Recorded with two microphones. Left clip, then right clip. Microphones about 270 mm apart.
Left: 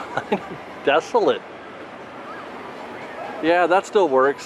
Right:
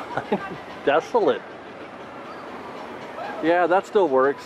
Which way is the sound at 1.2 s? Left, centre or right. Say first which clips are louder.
Left 2 dB; left.